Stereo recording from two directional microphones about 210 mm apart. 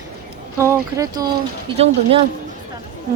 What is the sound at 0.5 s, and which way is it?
Speech, 15° right (ahead or behind).